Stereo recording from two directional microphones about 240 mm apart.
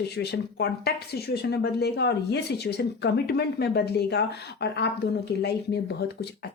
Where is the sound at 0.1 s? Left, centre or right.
Left.